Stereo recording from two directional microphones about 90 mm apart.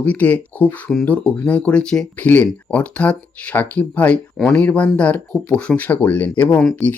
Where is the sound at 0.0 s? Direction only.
15° left (ahead or behind).